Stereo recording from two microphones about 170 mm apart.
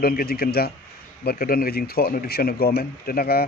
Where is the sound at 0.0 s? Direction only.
65° left (ahead or behind).